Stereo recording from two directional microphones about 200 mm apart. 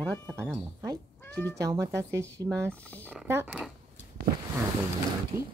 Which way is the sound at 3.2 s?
10° right (ahead or behind).